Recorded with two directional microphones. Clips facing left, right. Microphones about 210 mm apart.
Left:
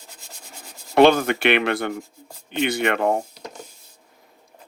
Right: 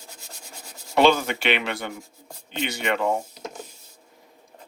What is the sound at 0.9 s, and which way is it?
Speech, 55° left (ahead or behind).